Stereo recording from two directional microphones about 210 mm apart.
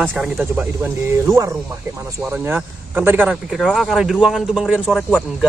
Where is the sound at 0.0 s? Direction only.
5° right (ahead or behind).